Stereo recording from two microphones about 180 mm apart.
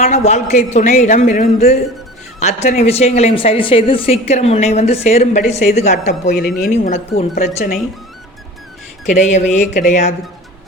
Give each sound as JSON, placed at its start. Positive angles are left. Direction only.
{"t": 0.0, "sound": "speech", "side_deg": 40}
{"t": 6.3, "sound": "speech", "side_deg": 0}
{"t": 6.7, "sound": "speech", "side_deg": 35}
{"t": 9.0, "sound": "speech", "side_deg": 40}